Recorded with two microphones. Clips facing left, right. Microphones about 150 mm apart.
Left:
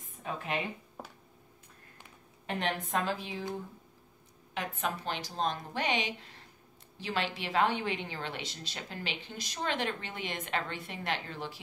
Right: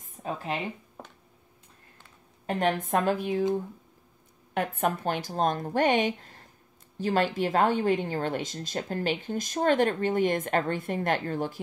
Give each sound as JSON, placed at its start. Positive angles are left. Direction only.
{"t": 0.0, "sound": "a sound", "side_deg": -35}
{"t": 2.4, "sound": "a woman's voice", "side_deg": -50}
{"t": 4.6, "sound": "a woman's voice", "side_deg": -50}